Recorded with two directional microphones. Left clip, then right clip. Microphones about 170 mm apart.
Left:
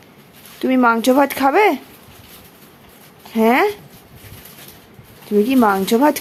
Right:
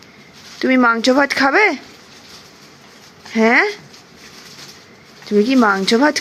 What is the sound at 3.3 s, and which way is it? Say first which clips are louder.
Speech: right 1 dB; 5° left (ahead or behind).